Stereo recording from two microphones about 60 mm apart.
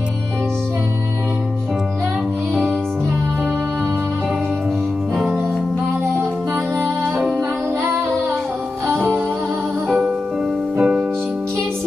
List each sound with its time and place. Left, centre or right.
8.9 s music: right
10.8 s music: centre